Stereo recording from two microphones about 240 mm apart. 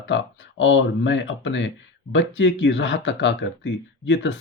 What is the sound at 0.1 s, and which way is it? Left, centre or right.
Speech, left.